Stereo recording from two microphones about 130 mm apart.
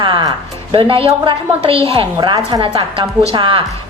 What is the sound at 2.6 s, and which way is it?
A woman's voice, 40° right (ahead or behind).